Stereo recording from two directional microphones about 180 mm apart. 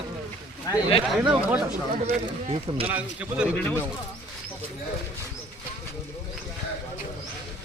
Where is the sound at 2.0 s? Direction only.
35° right (ahead or behind).